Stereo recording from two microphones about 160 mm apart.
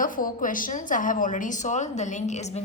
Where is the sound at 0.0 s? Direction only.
60° left (ahead or behind).